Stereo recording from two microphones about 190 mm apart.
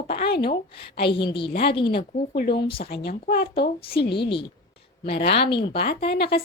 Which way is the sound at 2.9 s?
60° left (ahead or behind).